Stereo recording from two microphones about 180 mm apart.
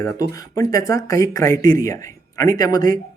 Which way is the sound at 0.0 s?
20° left (ahead or behind).